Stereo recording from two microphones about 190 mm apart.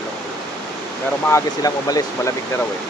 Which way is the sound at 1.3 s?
15° left (ahead or behind).